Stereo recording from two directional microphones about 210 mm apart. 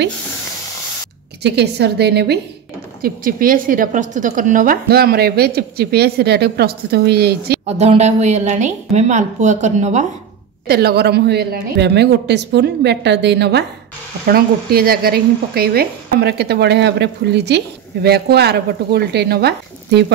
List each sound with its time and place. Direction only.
1.4 s speech: 50° right (ahead or behind)
7.6 s speech: 30° right (ahead or behind)
10.7 s speech: 50° right (ahead or behind)